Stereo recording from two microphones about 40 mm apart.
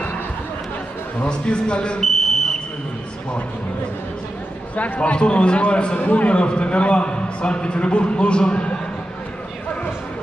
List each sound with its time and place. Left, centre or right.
1.2 s a man's voice: left
2.0 s a sound: centre
4.7 s a man's voice: left
5.1 s a man's voice: left